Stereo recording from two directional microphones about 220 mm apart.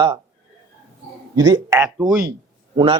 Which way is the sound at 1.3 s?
15° right (ahead or behind).